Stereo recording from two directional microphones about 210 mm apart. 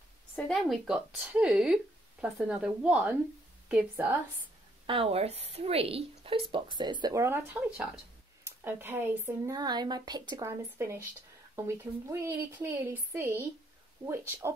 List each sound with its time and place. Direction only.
0.4 s a woman's voice: centre (ahead or behind)
4.8 s a woman's voice: 25° right (ahead or behind)